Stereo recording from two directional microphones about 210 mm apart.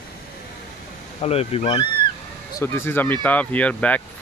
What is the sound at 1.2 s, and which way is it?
Speech, 30° left (ahead or behind).